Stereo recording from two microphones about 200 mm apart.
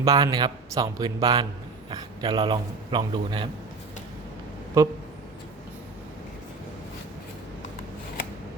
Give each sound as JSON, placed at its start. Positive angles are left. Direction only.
{"t": 0.0, "sound": "a man's voice", "side_deg": -20}
{"t": 4.8, "sound": "speech", "side_deg": -15}